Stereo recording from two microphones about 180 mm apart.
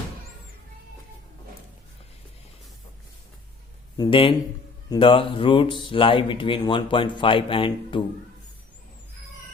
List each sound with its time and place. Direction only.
3.9 s speech: 25° left (ahead or behind)